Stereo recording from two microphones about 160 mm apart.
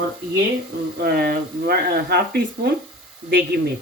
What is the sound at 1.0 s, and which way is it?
Speech, 70° right (ahead or behind).